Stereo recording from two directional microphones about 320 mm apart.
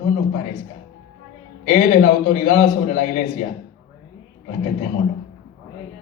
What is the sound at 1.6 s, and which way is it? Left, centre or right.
A man's voice, left.